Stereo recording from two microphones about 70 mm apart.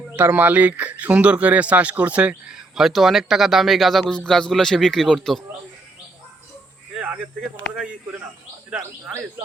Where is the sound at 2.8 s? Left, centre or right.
Centre.